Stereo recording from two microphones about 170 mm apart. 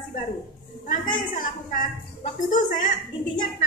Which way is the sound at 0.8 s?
50° left (ahead or behind).